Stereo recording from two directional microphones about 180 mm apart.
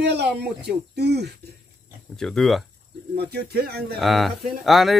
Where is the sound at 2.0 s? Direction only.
5° left (ahead or behind).